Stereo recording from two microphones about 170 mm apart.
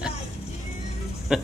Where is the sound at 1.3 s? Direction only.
5° right (ahead or behind).